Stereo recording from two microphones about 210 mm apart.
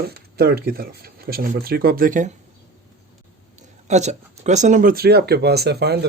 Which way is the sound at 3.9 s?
35° right (ahead or behind).